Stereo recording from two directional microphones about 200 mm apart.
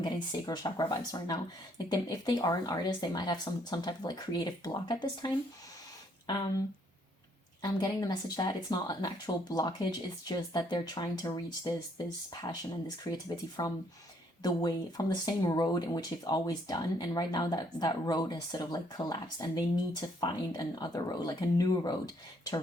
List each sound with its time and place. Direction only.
0.0 s speech: 20° left (ahead or behind)
7.6 s speech: 20° left (ahead or behind)